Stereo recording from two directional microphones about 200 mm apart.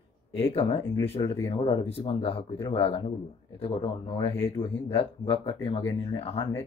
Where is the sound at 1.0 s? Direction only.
30° left (ahead or behind).